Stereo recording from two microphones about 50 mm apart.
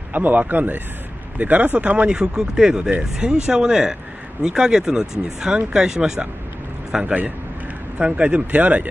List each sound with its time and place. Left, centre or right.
0.1 s speech: right; by 7.2 s centre
8.0 s speech: right